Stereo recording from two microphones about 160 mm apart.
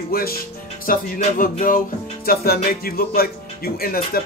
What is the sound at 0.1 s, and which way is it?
Speech, 70° left (ahead or behind).